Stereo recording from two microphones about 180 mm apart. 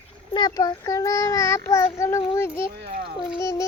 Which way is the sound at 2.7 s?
60° right (ahead or behind).